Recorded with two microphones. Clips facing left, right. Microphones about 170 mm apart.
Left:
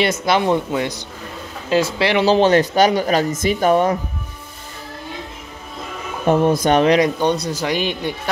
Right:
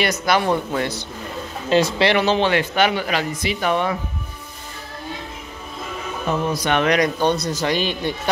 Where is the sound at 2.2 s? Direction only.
40° left (ahead or behind).